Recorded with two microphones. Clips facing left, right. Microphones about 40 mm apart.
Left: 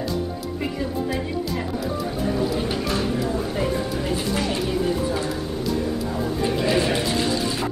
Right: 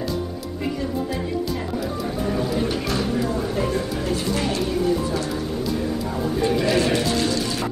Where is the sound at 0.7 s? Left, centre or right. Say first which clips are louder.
Left 1 dB; centre.